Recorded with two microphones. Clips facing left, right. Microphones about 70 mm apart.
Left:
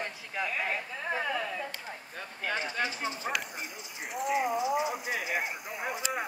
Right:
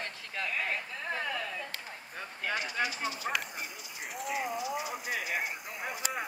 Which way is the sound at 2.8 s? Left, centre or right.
Left.